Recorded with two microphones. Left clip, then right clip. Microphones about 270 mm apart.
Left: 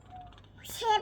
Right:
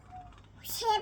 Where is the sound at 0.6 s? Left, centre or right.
Centre.